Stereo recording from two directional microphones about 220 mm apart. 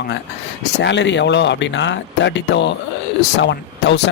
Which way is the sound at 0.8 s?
55° left (ahead or behind).